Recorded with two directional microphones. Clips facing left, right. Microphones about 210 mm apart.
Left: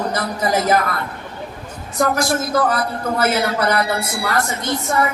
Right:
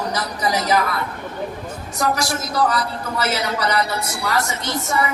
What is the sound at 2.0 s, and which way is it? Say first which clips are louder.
A man's voice: left 4 dB; 55° left (ahead or behind).